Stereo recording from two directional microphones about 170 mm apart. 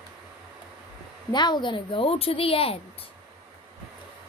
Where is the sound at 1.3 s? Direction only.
25° left (ahead or behind).